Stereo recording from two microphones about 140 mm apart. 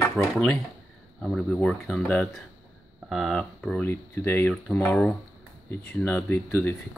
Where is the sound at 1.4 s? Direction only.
5° left (ahead or behind).